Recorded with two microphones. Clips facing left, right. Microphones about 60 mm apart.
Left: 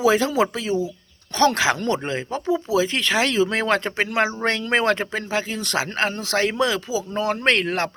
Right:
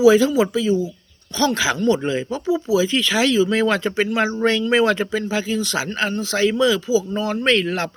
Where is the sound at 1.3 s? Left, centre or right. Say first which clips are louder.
Left 1 dB; left.